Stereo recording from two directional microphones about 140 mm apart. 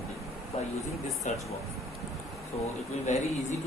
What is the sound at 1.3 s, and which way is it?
Speech, 60° left (ahead or behind).